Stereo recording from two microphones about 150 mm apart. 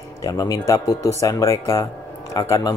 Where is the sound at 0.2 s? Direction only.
25° left (ahead or behind).